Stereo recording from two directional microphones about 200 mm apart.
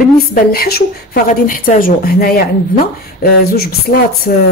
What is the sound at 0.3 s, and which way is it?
A woman's voice, 50° left (ahead or behind).